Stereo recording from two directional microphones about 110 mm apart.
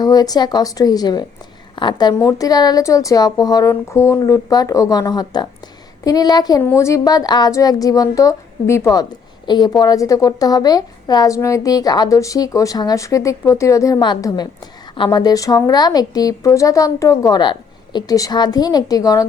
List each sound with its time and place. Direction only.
0.0 s a woman's voice: 35° left (ahead or behind)
6.6 s speech: 25° left (ahead or behind)
9.5 s speech: 40° left (ahead or behind)